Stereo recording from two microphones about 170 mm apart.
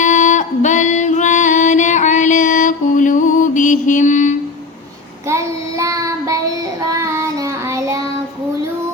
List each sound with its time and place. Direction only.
0.0 s female singing: 45° left (ahead or behind)
5.3 s child singing: 20° right (ahead or behind)